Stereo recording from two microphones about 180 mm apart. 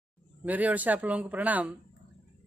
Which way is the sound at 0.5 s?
10° right (ahead or behind).